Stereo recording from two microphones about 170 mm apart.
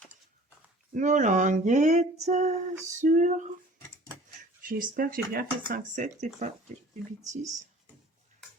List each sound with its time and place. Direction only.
0.9 s female singing: 45° right (ahead or behind)
4.6 s speech: 55° right (ahead or behind)